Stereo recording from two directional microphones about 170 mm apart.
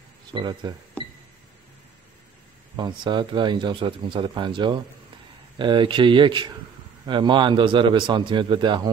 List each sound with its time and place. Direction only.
0.3 s speech: 30° right (ahead or behind)
2.7 s speech: 25° right (ahead or behind)